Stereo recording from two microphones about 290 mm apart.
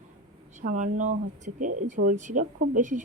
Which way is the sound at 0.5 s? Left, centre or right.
Right.